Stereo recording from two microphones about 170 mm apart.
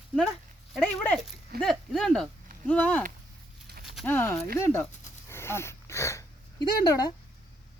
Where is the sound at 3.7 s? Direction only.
70° right (ahead or behind).